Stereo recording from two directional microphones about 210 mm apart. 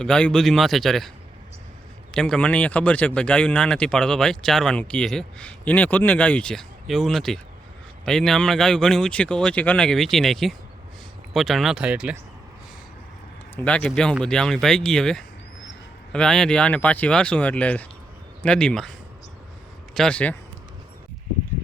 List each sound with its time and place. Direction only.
0.0 s speech: 5° left (ahead or behind)
2.1 s speech: 5° left (ahead or behind)
13.6 s speech: 5° left (ahead or behind)